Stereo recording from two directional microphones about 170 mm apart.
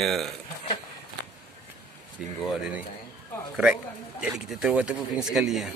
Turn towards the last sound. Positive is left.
turn(degrees=0)  # may be behind; listen again after turning